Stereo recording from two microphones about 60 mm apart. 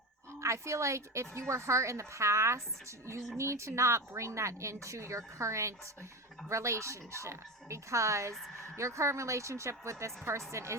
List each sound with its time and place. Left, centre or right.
0.3 s speech: right